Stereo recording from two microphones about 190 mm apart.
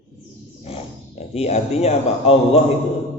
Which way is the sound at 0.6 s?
30° left (ahead or behind).